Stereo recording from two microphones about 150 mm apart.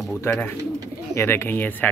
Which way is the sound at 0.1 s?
15° left (ahead or behind).